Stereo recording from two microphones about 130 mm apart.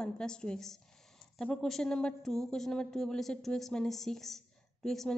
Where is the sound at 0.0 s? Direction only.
5° left (ahead or behind).